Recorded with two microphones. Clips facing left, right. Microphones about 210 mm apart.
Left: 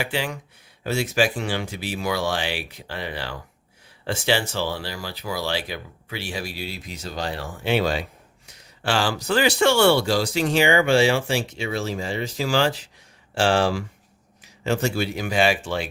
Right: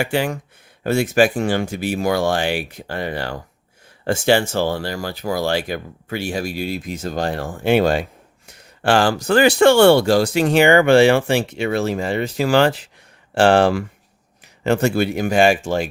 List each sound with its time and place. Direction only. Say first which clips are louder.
0.0 s speech: right 7 dB; 50° right (ahead or behind)